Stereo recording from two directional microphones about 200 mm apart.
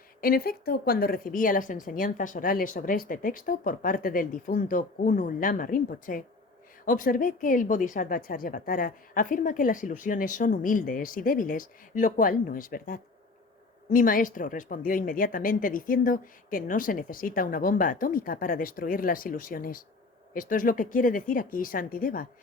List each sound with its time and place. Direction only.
0.2 s a woman's voice: 50° left (ahead or behind)